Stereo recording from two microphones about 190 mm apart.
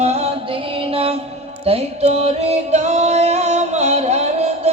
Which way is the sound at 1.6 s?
30° right (ahead or behind).